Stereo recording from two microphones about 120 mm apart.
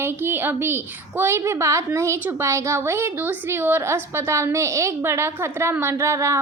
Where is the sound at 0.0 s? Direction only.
20° right (ahead or behind).